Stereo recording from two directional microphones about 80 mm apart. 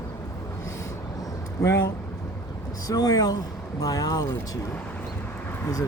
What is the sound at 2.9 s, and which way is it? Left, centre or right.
Speech, left.